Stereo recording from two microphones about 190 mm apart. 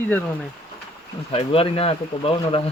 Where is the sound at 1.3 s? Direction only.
30° left (ahead or behind).